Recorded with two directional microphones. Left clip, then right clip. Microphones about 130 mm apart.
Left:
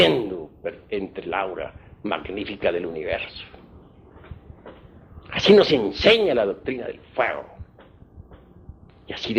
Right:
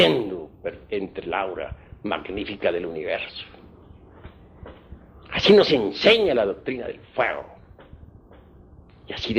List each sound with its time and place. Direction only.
0.0 s speech: 40° right (ahead or behind)
4.2 s train: 40° right (ahead or behind)
5.2 s a man's voice: 40° right (ahead or behind)
9.0 s speech: 35° right (ahead or behind)